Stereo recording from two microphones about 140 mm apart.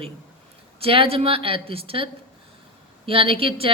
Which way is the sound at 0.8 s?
40° right (ahead or behind).